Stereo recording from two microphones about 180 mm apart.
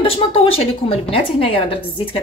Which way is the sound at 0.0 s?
30° left (ahead or behind).